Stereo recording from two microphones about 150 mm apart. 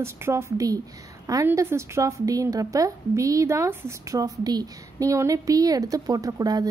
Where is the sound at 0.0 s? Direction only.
20° right (ahead or behind).